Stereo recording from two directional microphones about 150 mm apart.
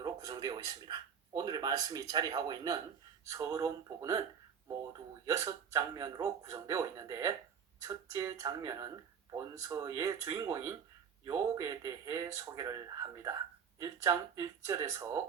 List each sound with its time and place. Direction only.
0.0 s speech: 25° right (ahead or behind)
5.2 s speech: 20° right (ahead or behind)